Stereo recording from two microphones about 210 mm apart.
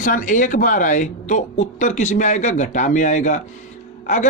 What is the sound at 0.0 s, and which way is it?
Speech, 40° left (ahead or behind).